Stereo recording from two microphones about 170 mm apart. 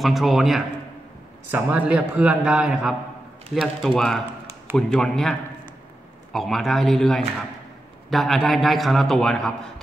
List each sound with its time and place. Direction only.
0.0 s a man's voice: centre (ahead or behind)
6.3 s a man's voice: centre (ahead or behind)